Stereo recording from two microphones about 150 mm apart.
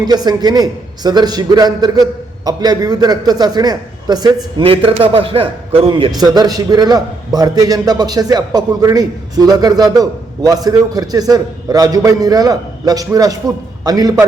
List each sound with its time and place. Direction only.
0.0 s a man's voice: 25° right (ahead or behind)
4.6 s a man's voice: 35° right (ahead or behind)